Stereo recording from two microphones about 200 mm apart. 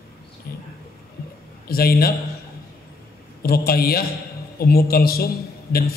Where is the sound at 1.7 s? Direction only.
50° left (ahead or behind).